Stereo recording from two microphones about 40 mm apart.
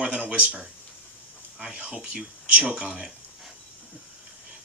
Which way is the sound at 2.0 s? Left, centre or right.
Right.